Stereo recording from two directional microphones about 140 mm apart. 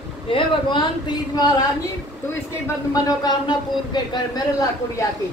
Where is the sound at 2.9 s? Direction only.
30° left (ahead or behind).